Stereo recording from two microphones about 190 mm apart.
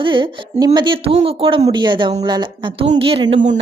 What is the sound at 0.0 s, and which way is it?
Speech, 25° right (ahead or behind).